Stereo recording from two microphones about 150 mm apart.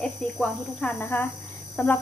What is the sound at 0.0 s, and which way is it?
A woman's voice, 5° left (ahead or behind).